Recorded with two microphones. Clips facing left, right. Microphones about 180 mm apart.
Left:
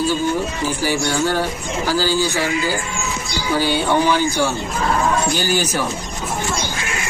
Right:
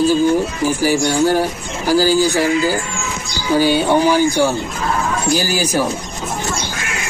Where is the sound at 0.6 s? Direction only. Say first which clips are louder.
Right 5 dB; 10° right (ahead or behind).